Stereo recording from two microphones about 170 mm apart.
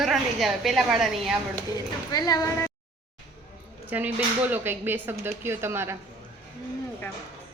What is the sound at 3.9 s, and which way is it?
Speech, 10° right (ahead or behind).